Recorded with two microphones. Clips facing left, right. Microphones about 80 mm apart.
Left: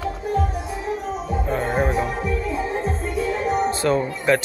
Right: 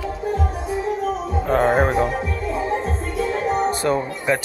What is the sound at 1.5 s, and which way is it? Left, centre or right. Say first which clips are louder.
Speech: right 6 dB; right.